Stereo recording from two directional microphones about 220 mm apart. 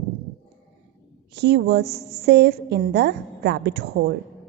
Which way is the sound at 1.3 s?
50° right (ahead or behind).